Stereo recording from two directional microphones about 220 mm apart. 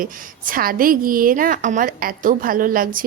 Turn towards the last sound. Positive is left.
turn(degrees=-40)  # may be behind; listen again after turning